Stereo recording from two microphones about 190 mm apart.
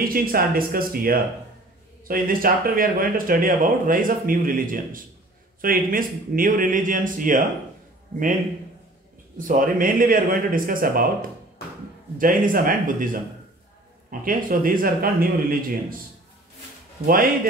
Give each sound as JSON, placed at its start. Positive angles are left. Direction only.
{"t": 0.0, "sound": "speech", "side_deg": -50}
{"t": 9.4, "sound": "speech", "side_deg": -45}
{"t": 12.2, "sound": "speech", "side_deg": -45}
{"t": 14.2, "sound": "speech", "side_deg": -45}
{"t": 17.0, "sound": "speech", "side_deg": -50}